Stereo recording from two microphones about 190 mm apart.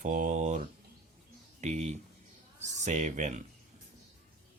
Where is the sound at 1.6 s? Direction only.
40° right (ahead or behind).